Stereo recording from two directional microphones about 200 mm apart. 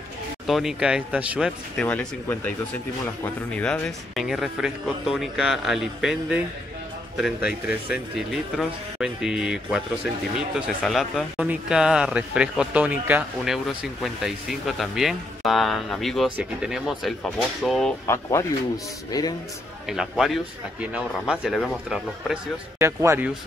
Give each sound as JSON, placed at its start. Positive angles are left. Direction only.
{"t": 0.5, "sound": "speech", "side_deg": 0}
{"t": 3.5, "sound": "speech", "side_deg": 5}
{"t": 18.0, "sound": "speech", "side_deg": 15}
{"t": 19.9, "sound": "speech", "side_deg": 0}
{"t": 22.8, "sound": "speech", "side_deg": -15}